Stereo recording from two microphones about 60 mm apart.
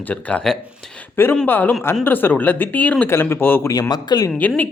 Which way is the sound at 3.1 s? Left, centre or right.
Left.